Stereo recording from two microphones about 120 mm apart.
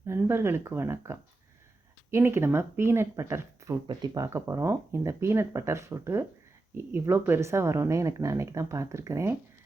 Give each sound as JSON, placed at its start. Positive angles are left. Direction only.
{"t": 0.2, "sound": "speech", "side_deg": -20}
{"t": 4.3, "sound": "speech", "side_deg": -25}